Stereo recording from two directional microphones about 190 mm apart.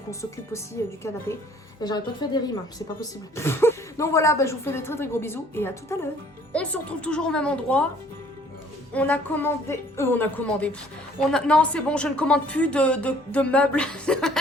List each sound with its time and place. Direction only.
0.1 s speech: 15° left (ahead or behind)
1.8 s a woman's voice: 20° left (ahead or behind)
8.9 s a woman's voice: 10° left (ahead or behind)